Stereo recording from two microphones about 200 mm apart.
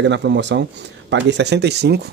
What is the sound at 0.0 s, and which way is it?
Speech, 60° right (ahead or behind).